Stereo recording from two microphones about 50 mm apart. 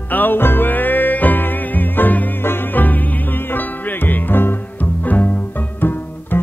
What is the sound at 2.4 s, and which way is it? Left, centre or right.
Music, left.